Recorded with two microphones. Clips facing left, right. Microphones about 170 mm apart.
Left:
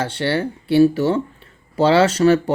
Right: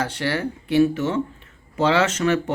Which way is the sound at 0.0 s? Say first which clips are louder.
Left 3 dB; 30° left (ahead or behind).